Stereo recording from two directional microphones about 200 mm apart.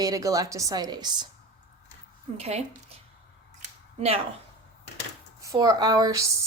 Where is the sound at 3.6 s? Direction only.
30° right (ahead or behind).